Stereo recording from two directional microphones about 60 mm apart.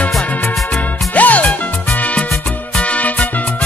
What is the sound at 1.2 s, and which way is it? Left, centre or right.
Music, left.